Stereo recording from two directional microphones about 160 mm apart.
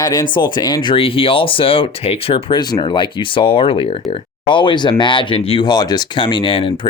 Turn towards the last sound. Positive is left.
turn(degrees=35)  # may be behind; listen again after turning